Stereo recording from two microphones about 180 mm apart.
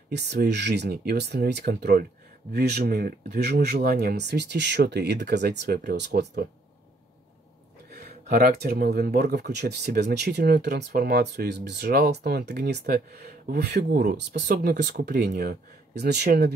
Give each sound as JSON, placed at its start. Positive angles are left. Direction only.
{"t": 0.1, "sound": "speech", "side_deg": -70}
{"t": 8.0, "sound": "speech", "side_deg": -55}